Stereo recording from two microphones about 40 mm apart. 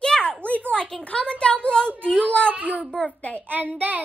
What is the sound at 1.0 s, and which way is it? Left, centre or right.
Speech, left.